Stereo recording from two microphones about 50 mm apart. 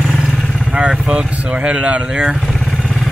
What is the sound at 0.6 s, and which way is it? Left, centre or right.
Vehicle, centre.